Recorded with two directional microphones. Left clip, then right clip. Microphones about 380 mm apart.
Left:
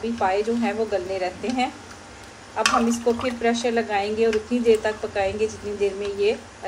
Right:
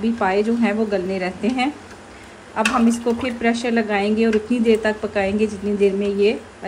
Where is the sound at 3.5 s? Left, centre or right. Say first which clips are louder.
Right 2 dB; centre.